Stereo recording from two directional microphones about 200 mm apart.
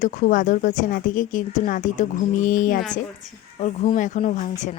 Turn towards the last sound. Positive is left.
turn(degrees=35)  # may be behind; listen again after turning